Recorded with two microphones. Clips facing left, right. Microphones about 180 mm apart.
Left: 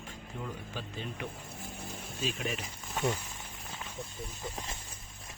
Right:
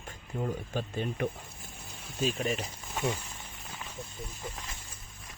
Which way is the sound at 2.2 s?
40° right (ahead or behind).